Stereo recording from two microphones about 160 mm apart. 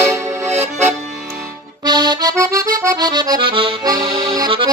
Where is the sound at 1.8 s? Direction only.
25° right (ahead or behind).